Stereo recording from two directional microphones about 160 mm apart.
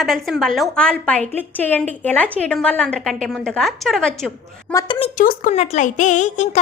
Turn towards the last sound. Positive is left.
turn(degrees=50)  # may be behind; listen again after turning